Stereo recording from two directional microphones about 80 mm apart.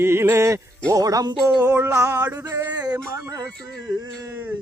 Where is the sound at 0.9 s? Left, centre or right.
Right.